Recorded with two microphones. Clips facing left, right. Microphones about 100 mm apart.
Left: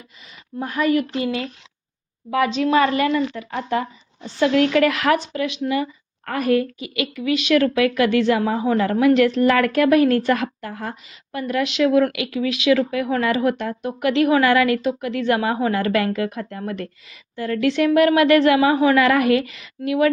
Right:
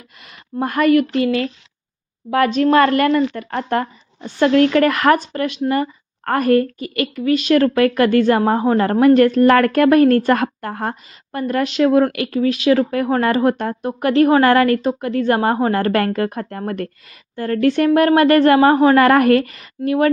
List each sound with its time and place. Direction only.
0.3 s speech: 60° right (ahead or behind); by 20.1 s 40° right (ahead or behind)